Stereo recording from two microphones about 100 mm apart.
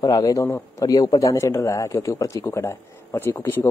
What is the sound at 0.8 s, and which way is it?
Speech, 40° left (ahead or behind).